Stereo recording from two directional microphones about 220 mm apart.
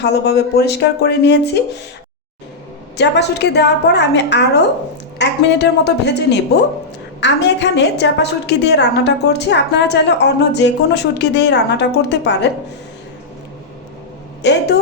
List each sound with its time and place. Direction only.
0.0 s a woman's voice: 50° left (ahead or behind)
3.0 s a woman's voice: 50° left (ahead or behind)
14.4 s a woman's voice: 50° left (ahead or behind)